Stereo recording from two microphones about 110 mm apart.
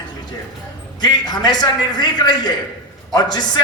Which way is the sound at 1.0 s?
40° left (ahead or behind).